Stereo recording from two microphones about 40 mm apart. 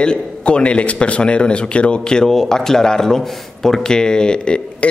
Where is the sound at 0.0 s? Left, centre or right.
Left.